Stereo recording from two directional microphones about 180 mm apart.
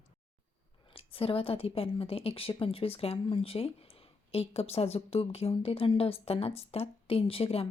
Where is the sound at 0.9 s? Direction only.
30° left (ahead or behind).